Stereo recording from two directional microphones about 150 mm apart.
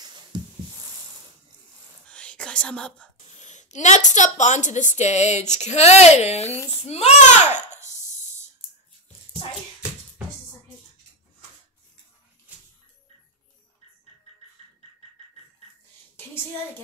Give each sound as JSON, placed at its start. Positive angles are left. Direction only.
{"t": 0.0, "sound": "a sound", "side_deg": -30}
{"t": 2.0, "sound": "whispering", "side_deg": 5}
{"t": 3.3, "sound": "a woman's voice", "side_deg": 50}
{"t": 12.5, "sound": "music", "side_deg": -10}